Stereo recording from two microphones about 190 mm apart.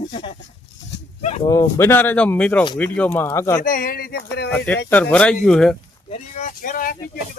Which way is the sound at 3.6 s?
45° left (ahead or behind).